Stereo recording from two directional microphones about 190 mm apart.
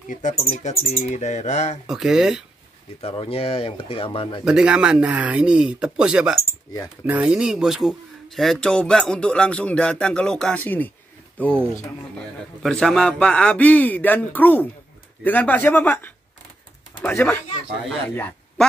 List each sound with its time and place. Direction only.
0.1 s speech: 40° left (ahead or behind)
1.9 s speech: 5° right (ahead or behind)
3.0 s speech: 30° left (ahead or behind)
4.5 s a man's voice: 5° right (ahead or behind)
12.6 s a man's voice: centre (ahead or behind)